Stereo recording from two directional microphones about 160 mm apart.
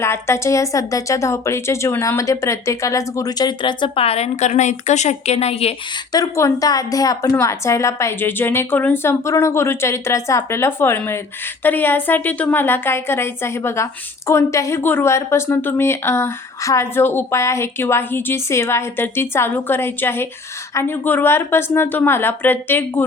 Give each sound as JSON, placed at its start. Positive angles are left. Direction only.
{"t": 0.0, "sound": "a woman's voice", "side_deg": 15}
{"t": 6.1, "sound": "speech", "side_deg": 20}